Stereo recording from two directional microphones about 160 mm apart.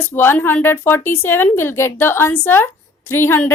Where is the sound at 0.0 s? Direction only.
15° left (ahead or behind).